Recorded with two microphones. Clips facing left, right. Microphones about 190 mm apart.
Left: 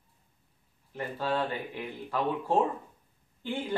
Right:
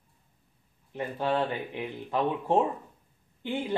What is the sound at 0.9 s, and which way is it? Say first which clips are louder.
Speech: right 3 dB; 20° right (ahead or behind).